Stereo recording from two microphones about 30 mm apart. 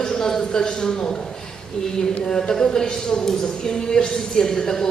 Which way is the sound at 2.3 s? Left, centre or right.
Left.